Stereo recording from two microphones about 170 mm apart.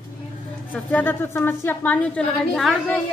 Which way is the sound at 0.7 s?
10° left (ahead or behind).